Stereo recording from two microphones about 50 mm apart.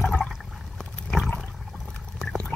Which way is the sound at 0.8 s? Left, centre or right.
Centre.